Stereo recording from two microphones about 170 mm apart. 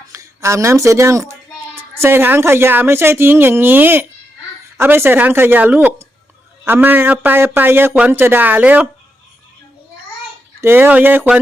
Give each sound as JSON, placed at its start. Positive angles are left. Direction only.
{"t": 0.1, "sound": "a sound", "side_deg": -15}
{"t": 2.0, "sound": "a man's voice", "side_deg": -15}
{"t": 10.6, "sound": "a man's voice", "side_deg": -10}